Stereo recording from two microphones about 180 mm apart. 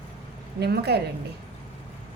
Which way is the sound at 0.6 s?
65° right (ahead or behind).